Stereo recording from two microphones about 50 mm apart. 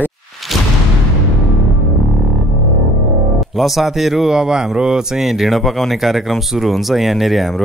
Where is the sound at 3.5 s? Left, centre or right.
Centre.